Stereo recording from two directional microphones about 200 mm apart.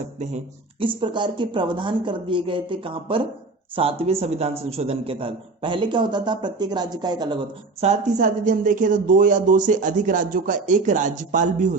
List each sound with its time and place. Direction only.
0.8 s a man's voice: 25° right (ahead or behind)
7.8 s speech: 35° right (ahead or behind)